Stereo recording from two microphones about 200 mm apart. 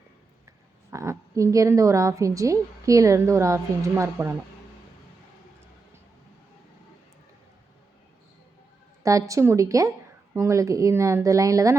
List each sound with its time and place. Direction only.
0.4 s a woman's voice: 15° right (ahead or behind)
9.0 s a woman's voice: 15° right (ahead or behind)